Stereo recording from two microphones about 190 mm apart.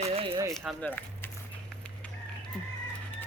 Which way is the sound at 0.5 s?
Centre (ahead or behind).